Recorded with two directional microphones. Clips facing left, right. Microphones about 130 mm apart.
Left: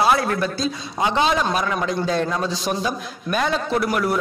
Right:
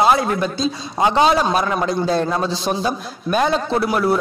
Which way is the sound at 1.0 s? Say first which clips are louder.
Right 4 dB; 35° right (ahead or behind).